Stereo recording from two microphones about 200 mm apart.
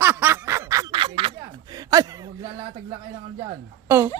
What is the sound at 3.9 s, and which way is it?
Speech, 10° right (ahead or behind).